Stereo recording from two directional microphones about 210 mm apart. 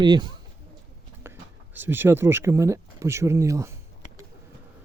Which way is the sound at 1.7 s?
10° right (ahead or behind).